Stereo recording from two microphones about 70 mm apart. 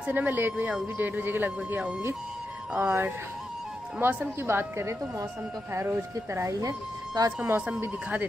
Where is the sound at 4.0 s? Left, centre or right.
Right.